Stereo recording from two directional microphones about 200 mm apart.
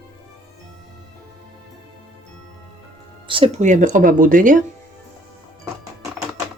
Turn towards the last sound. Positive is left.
turn(degrees=-40)  # may be behind; listen again after turning